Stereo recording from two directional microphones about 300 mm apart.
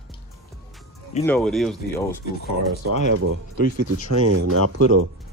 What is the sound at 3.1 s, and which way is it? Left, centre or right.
Speech, right.